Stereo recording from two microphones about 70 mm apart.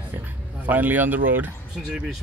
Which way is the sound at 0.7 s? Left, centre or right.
Right.